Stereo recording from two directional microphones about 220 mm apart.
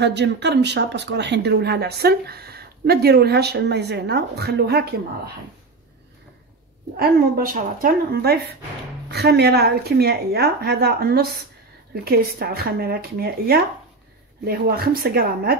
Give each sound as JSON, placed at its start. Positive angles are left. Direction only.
{"t": 0.0, "sound": "speech", "side_deg": -50}
{"t": 7.0, "sound": "speech", "side_deg": -40}